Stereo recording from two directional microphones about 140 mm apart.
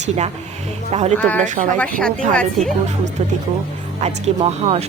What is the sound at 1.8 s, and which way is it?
Speech, 10° left (ahead or behind).